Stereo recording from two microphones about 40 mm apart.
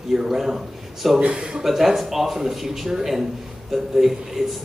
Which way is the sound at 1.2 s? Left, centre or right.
Right.